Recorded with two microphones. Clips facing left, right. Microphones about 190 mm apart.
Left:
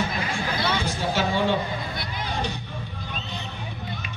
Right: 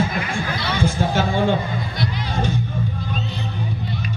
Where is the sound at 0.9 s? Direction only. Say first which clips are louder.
Right 4 dB; 50° right (ahead or behind).